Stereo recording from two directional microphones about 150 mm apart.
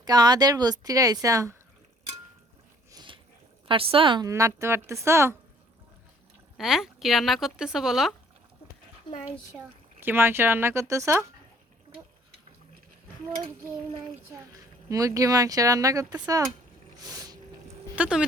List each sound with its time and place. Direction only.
0.0 s a woman's voice: 25° right (ahead or behind)
2.9 s a sound: 30° right (ahead or behind)
3.7 s a woman's voice: 35° right (ahead or behind)
4.3 s speech: 20° right (ahead or behind)
6.6 s speech: centre (ahead or behind)
9.6 s speech: 15° right (ahead or behind)
14.3 s a woman's voice: 20° right (ahead or behind)
17.0 s a sound: 25° right (ahead or behind)
17.9 s speech: 10° right (ahead or behind)